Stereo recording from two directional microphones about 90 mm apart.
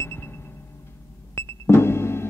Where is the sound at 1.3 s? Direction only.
25° left (ahead or behind).